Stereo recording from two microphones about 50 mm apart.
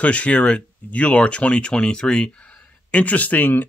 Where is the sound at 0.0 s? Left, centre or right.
Left.